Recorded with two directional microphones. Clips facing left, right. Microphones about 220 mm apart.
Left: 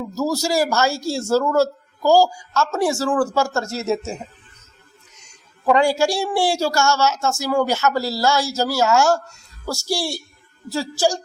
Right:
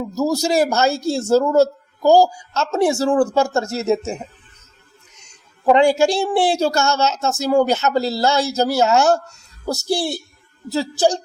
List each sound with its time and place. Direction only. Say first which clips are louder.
0.1 s a man's voice: right 3 dB; 20° right (ahead or behind)
5.6 s speech: right 3 dB; 20° right (ahead or behind)